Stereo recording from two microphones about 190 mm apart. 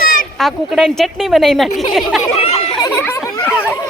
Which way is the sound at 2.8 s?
15° left (ahead or behind).